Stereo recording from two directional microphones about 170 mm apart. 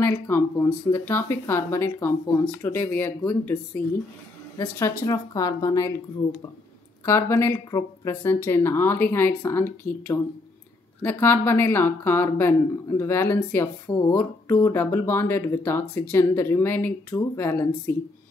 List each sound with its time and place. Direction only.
0.0 s a woman's voice: 15° left (ahead or behind)
7.1 s speech: 15° left (ahead or behind)
11.0 s speech: 15° left (ahead or behind)